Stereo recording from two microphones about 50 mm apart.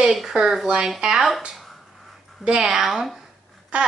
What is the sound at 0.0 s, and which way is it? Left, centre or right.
Speech, centre.